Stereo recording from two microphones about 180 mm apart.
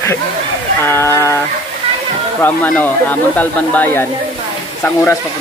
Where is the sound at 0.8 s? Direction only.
15° left (ahead or behind).